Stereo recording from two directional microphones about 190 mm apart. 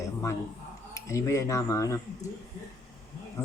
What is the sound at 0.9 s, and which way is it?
Speech, 15° left (ahead or behind).